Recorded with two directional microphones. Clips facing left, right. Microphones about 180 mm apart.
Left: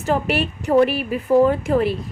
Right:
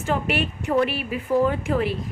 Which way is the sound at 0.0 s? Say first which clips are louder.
Left 4 dB; 40° left (ahead or behind).